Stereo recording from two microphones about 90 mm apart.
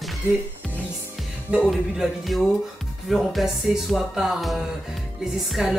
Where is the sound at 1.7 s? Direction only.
Centre (ahead or behind).